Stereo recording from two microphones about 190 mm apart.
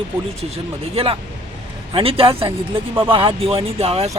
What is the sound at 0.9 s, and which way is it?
Speech, 30° right (ahead or behind).